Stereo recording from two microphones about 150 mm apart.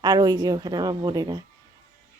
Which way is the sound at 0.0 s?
30° right (ahead or behind).